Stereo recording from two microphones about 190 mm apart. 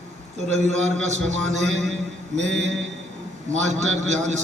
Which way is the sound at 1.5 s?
35° right (ahead or behind).